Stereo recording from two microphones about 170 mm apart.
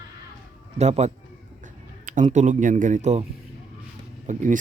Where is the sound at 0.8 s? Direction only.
40° right (ahead or behind).